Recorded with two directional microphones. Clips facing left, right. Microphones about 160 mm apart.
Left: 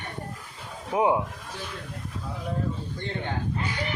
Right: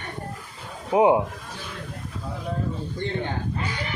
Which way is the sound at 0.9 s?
20° right (ahead or behind).